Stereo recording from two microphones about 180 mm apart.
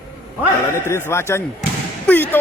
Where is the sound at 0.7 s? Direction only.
15° left (ahead or behind).